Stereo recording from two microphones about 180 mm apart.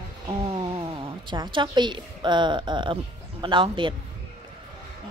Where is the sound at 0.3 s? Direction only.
30° right (ahead or behind).